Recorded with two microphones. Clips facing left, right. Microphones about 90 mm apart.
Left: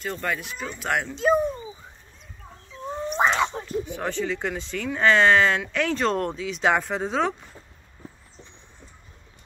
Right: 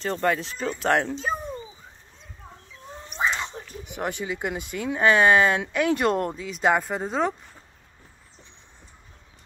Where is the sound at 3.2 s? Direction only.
90° left.